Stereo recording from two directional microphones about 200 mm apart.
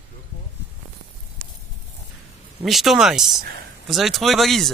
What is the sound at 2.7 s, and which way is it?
Speech, centre (ahead or behind).